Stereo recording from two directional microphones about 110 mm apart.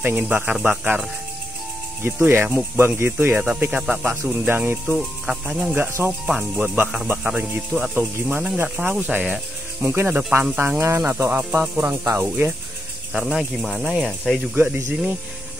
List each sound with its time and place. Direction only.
0.0 s speech: 15° right (ahead or behind)
2.2 s speech: 20° right (ahead or behind)
4.8 s speech: centre (ahead or behind)
5.8 s speech: 20° right (ahead or behind)
6.2 s speech: 5° right (ahead or behind)
11.3 s speech: 5° right (ahead or behind)
11.8 s speech: 20° right (ahead or behind)
13.1 s speech: centre (ahead or behind)
14.5 s speech: 20° right (ahead or behind)